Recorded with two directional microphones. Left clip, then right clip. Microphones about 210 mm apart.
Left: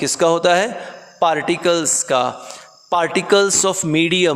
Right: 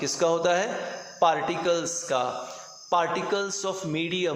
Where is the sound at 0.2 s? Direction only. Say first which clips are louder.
Left 9 dB; 55° left (ahead or behind).